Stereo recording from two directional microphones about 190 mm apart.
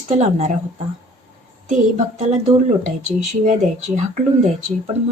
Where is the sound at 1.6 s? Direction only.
40° right (ahead or behind).